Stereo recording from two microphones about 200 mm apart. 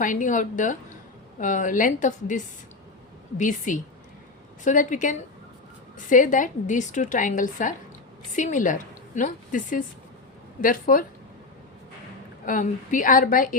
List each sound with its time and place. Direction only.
0.0 s a woman's voice: 40° left (ahead or behind)
12.5 s a woman's voice: 40° left (ahead or behind)